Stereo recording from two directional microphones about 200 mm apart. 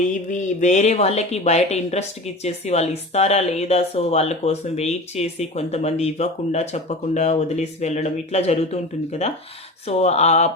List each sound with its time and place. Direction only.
0.3 s a woman's voice: 40° left (ahead or behind)